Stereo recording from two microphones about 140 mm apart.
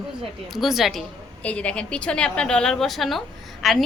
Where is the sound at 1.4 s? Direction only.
10° left (ahead or behind).